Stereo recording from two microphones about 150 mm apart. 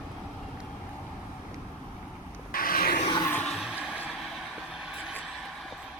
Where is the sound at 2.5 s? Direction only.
75° left (ahead or behind).